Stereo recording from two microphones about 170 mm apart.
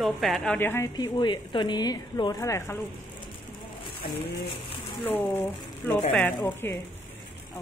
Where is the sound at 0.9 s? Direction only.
25° left (ahead or behind).